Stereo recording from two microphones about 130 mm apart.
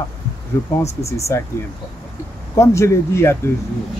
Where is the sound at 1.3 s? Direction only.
20° left (ahead or behind).